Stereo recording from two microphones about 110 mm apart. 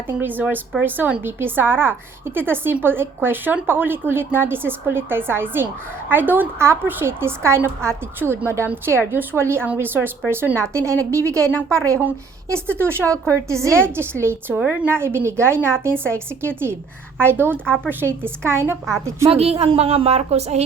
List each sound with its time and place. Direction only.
0.1 s a woman's voice: 20° right (ahead or behind)
19.3 s a woman's voice: 65° right (ahead or behind)